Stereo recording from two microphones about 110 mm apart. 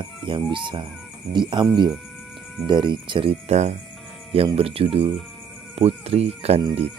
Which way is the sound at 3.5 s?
90° right.